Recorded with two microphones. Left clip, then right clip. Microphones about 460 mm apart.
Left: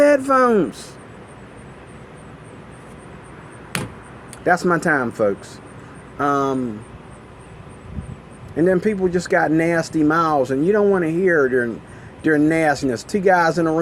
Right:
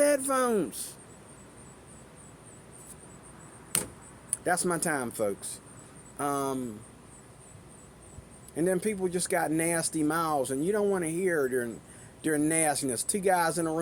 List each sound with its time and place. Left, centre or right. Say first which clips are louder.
0.0 s a sound: left 11 dB; right
4.4 s speech: left 12 dB; right
8.5 s speech: left 11 dB; right